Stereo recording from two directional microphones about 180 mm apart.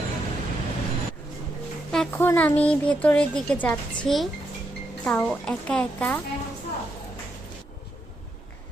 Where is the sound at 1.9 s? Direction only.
5° left (ahead or behind).